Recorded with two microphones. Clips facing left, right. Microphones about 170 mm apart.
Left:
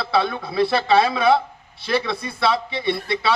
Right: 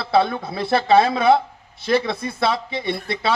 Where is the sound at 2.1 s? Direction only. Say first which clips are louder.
Even; 50° right (ahead or behind).